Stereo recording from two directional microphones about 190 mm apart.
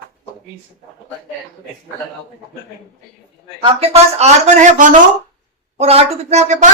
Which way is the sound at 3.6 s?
30° right (ahead or behind).